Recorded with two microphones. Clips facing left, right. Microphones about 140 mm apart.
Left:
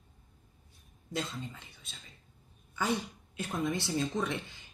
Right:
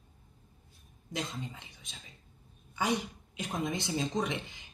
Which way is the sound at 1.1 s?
15° right (ahead or behind).